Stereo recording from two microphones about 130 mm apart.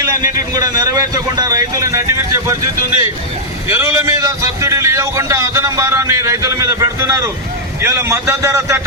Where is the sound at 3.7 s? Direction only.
20° right (ahead or behind).